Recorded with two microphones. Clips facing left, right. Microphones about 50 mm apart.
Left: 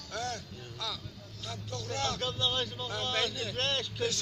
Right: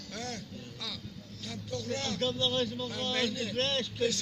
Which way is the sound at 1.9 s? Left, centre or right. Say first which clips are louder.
Right 1 dB; left.